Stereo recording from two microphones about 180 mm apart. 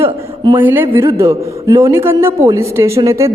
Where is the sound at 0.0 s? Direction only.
25° right (ahead or behind).